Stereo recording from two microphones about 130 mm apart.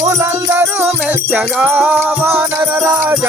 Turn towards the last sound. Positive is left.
turn(degrees=-10)  # may be behind; listen again after turning